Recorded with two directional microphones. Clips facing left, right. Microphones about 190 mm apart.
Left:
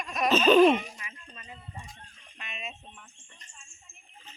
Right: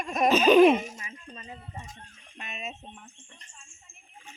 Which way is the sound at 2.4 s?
45° right (ahead or behind).